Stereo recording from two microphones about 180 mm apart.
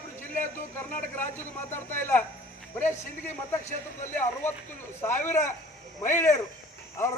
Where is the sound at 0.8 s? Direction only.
10° left (ahead or behind).